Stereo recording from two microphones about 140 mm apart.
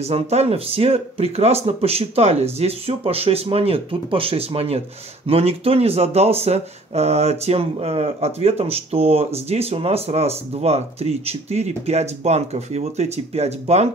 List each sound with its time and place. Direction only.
0.1 s speech: 45° right (ahead or behind)